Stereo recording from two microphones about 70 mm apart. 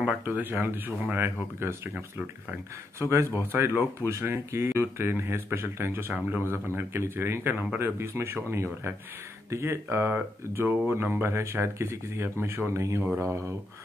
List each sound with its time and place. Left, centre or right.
0.2 s speech: right